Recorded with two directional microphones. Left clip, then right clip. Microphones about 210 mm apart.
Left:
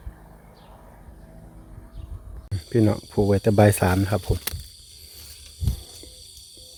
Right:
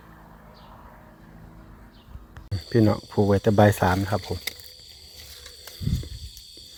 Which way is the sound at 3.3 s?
20° left (ahead or behind).